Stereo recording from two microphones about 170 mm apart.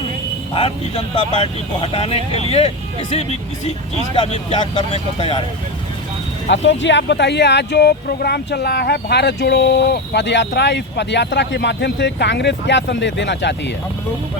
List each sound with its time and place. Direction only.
0.5 s speech: 30° left (ahead or behind)
4.6 s speech: 25° left (ahead or behind)
6.5 s speech: 90° left